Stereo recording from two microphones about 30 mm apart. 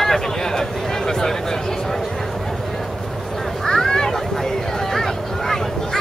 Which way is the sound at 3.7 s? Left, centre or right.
Centre.